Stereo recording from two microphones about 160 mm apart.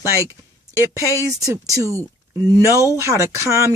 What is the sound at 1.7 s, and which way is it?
Speech, 20° right (ahead or behind).